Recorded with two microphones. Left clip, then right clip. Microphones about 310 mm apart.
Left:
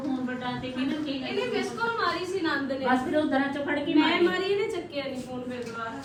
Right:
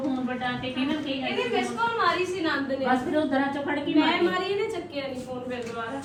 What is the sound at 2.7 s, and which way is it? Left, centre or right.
A man's voice, centre.